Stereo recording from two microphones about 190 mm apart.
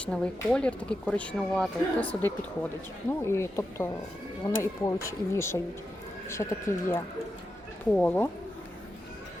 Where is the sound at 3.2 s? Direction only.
15° left (ahead or behind).